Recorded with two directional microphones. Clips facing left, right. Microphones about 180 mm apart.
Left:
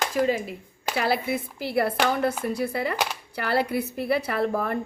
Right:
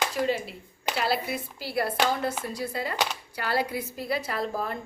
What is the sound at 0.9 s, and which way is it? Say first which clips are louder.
A woman's voice: left 3 dB; 55° left (ahead or behind).